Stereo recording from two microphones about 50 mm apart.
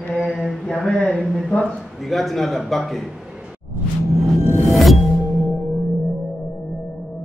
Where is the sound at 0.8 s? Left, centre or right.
Left.